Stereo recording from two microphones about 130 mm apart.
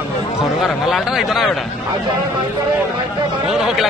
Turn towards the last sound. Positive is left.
turn(degrees=-5)  # may be behind; listen again after turning